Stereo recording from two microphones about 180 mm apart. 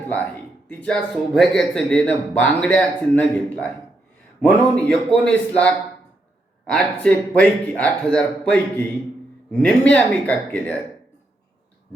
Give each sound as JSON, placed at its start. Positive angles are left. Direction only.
{"t": 0.7, "sound": "speech", "side_deg": 5}